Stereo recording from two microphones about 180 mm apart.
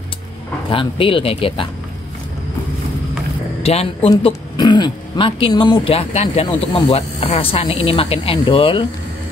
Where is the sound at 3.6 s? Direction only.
35° left (ahead or behind).